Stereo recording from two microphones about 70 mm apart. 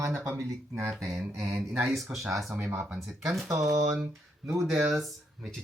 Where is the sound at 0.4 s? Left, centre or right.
Right.